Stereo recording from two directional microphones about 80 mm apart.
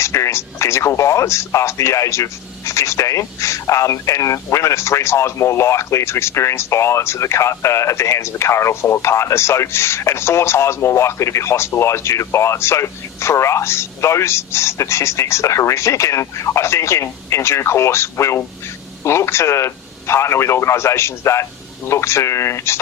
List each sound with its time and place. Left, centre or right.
0.0 s speech: left